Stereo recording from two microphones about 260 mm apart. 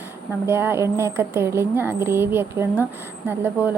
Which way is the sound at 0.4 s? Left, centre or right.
Centre.